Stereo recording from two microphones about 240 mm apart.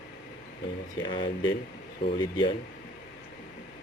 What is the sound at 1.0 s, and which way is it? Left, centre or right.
Speech, centre.